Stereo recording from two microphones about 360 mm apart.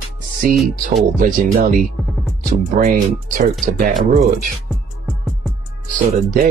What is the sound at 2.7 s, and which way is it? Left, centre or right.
Speech, right.